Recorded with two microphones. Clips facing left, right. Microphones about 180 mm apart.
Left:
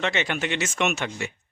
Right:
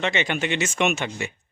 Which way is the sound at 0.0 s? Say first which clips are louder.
Right 2 dB; centre (ahead or behind).